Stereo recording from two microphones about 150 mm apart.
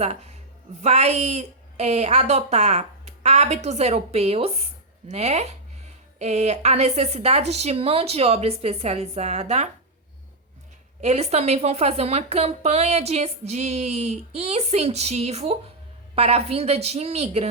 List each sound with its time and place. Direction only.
0.0 s a woman's voice: 45° right (ahead or behind)
11.0 s a woman's voice: 45° right (ahead or behind)